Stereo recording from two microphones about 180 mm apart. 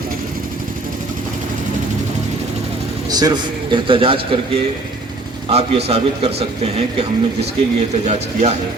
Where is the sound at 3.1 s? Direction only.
25° right (ahead or behind).